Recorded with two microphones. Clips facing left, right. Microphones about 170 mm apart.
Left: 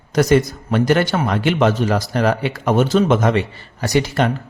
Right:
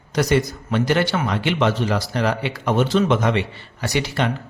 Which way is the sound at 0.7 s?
50° left (ahead or behind).